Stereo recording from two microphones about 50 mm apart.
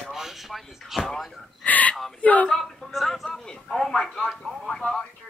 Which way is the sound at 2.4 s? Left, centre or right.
Centre.